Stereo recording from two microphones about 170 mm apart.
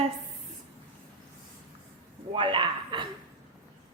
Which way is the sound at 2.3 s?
30° right (ahead or behind).